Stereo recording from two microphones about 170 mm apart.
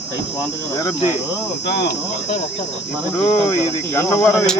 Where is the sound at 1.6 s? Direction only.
90° left.